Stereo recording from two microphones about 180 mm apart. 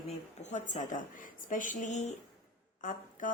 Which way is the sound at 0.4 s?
40° left (ahead or behind).